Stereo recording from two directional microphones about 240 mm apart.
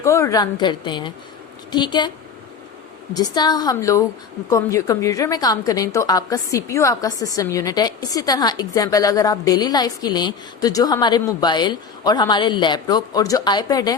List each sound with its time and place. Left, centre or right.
0.0 s a woman's voice: centre